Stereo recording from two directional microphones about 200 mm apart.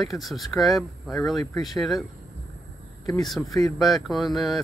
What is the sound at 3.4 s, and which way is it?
Speech, 20° left (ahead or behind).